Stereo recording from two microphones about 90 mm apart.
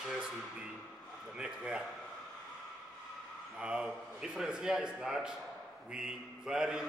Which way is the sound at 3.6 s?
10° right (ahead or behind).